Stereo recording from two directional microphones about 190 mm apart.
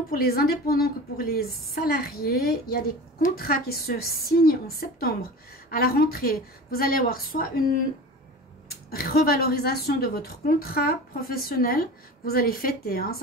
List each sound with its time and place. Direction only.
0.1 s a woman's voice: 55° left (ahead or behind)
8.9 s a woman's voice: 55° left (ahead or behind)